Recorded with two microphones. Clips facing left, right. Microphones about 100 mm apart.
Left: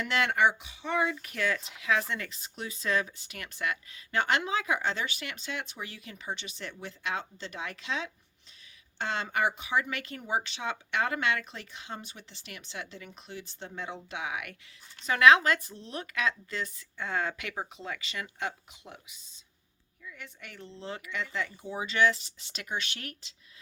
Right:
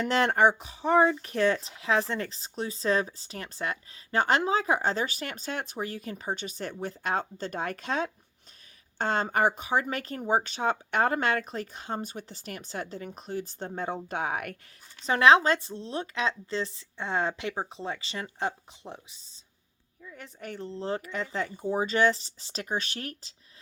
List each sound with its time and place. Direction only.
0.0 s speech: 35° right (ahead or behind)
15.0 s a woman's voice: 30° right (ahead or behind)